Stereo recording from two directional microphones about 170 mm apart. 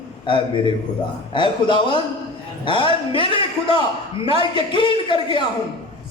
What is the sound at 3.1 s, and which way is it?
A man's voice, 30° left (ahead or behind).